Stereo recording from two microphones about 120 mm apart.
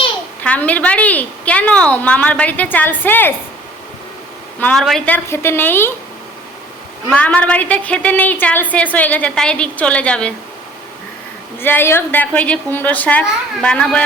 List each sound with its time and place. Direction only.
0.4 s a woman's voice: 10° left (ahead or behind)
4.6 s a woman's voice: 5° left (ahead or behind)
7.1 s a woman's voice: 10° left (ahead or behind)
11.6 s a woman's voice: 20° left (ahead or behind)